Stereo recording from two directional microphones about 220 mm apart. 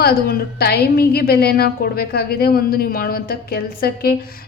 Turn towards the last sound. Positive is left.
turn(degrees=40)  # may be behind; listen again after turning